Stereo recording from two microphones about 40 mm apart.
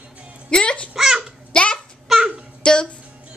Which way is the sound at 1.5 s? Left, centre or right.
Left.